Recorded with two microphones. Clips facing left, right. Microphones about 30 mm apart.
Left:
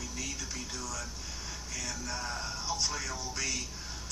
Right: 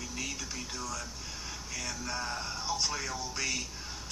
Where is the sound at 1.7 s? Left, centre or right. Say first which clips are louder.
Right 2 dB; right.